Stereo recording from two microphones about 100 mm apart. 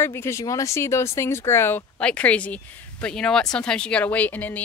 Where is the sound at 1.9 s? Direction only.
15° left (ahead or behind).